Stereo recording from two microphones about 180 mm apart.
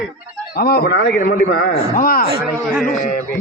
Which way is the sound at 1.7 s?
50° left (ahead or behind).